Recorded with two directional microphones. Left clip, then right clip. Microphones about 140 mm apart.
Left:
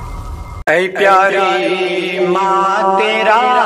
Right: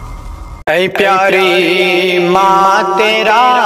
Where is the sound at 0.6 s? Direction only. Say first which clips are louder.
Right 1 dB; 65° right (ahead or behind).